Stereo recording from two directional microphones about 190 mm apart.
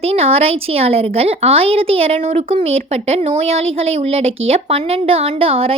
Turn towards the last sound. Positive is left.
turn(degrees=-30)  # may be behind; listen again after turning